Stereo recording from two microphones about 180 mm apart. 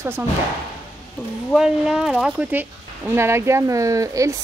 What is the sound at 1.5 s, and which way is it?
Speech, 5° right (ahead or behind).